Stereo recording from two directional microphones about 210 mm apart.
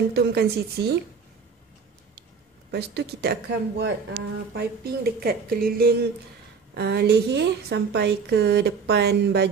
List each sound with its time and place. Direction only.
0.1 s a woman's voice: 50° right (ahead or behind)
2.7 s a woman's voice: 50° right (ahead or behind)